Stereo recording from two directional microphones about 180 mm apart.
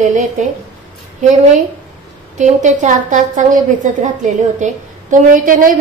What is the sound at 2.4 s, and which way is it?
A woman's voice, 45° right (ahead or behind).